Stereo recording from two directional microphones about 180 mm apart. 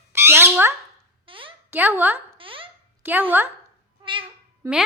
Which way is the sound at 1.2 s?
30° right (ahead or behind).